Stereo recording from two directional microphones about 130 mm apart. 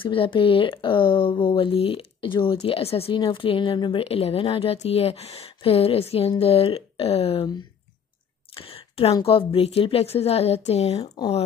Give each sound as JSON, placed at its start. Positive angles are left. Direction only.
{"t": 0.0, "sound": "speech", "side_deg": 40}
{"t": 8.5, "sound": "a sound", "side_deg": 45}
{"t": 9.2, "sound": "speech", "side_deg": 45}